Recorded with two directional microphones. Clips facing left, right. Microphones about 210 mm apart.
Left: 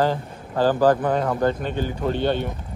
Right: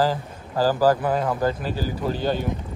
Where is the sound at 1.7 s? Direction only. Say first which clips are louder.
Left 2 dB; 35° right (ahead or behind).